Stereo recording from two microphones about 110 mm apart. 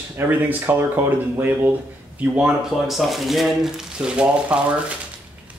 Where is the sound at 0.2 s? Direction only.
15° right (ahead or behind).